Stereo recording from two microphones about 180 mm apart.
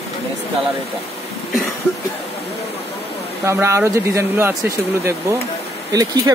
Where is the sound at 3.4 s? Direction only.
15° right (ahead or behind).